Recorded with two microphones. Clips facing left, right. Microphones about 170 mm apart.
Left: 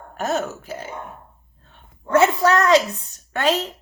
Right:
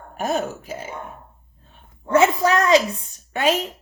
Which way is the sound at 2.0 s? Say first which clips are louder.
Even; 15° right (ahead or behind).